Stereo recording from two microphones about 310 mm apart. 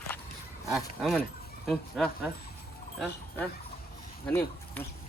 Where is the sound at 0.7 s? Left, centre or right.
Centre.